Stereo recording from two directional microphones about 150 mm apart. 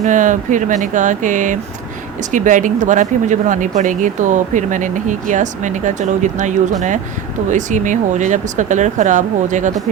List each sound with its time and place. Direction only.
0.0 s speech: 55° right (ahead or behind)